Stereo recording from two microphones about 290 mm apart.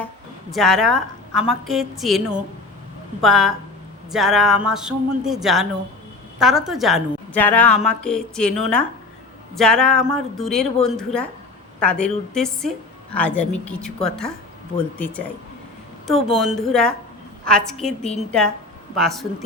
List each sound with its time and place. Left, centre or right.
0.5 s a woman's voice: centre
9.6 s a woman's voice: centre
16.4 s a woman's voice: centre
18.0 s a woman's voice: left
18.9 s a woman's voice: centre